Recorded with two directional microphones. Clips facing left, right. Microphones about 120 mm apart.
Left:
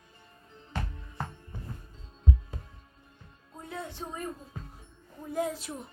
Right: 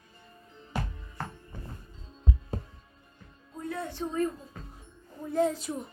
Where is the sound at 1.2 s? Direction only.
20° left (ahead or behind).